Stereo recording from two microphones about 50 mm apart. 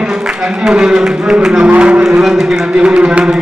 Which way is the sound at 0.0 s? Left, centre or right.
Centre.